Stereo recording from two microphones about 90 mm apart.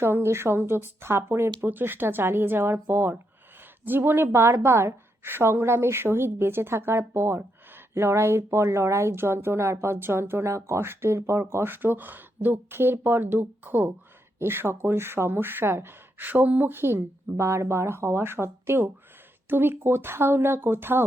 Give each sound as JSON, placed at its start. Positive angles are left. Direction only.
{"t": 0.0, "sound": "speech", "side_deg": -30}